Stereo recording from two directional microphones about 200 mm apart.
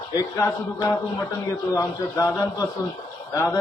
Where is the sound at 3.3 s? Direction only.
15° left (ahead or behind).